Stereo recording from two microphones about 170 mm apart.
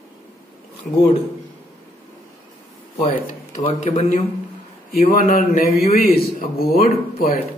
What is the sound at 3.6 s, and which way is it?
Speech, 35° left (ahead or behind).